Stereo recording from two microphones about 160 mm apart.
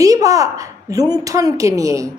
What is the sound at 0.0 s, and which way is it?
A woman's voice, 20° right (ahead or behind).